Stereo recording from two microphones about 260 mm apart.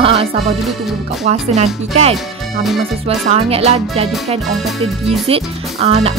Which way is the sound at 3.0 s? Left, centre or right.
Right.